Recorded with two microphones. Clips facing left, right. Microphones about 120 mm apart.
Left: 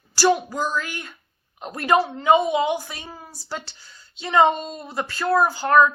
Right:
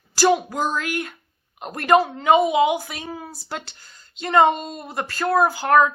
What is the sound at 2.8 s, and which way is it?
Speech, 65° right (ahead or behind).